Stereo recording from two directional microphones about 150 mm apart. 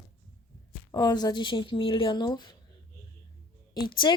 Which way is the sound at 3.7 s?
30° left (ahead or behind).